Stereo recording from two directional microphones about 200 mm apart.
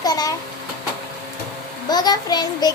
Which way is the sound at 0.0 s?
20° left (ahead or behind).